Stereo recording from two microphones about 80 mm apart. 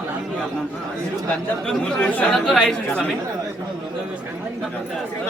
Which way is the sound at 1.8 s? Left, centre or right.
Centre.